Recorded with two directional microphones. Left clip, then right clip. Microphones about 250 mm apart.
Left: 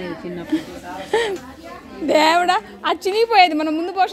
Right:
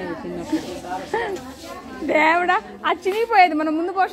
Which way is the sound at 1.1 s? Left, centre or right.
Left.